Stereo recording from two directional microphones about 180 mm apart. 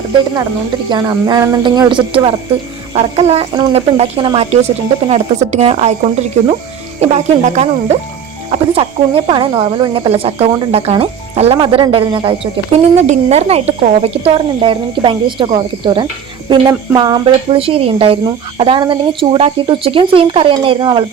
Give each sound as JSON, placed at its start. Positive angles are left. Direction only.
{"t": 0.9, "sound": "speech", "side_deg": -20}
{"t": 7.0, "sound": "speech", "side_deg": -40}